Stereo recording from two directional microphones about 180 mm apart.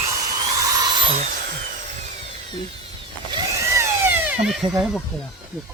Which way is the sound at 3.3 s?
15° right (ahead or behind).